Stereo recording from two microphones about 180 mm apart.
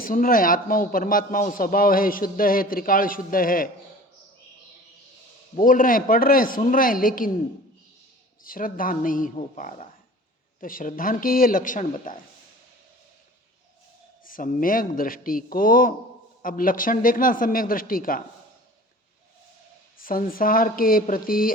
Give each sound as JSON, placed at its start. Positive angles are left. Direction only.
{"t": 0.0, "sound": "a man's voice", "side_deg": 50}
{"t": 5.5, "sound": "a man's voice", "side_deg": 50}
{"t": 8.4, "sound": "a man's voice", "side_deg": 50}
{"t": 14.3, "sound": "a man's voice", "side_deg": 50}
{"t": 20.0, "sound": "a man's voice", "side_deg": 50}